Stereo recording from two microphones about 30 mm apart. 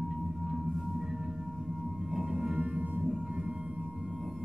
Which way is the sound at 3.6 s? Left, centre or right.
Right.